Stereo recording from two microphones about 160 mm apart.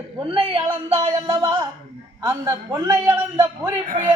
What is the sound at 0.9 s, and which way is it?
Music, 35° right (ahead or behind).